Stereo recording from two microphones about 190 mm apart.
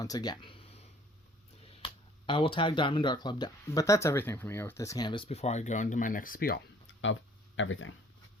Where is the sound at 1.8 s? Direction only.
25° left (ahead or behind); by 6.5 s 50° left (ahead or behind).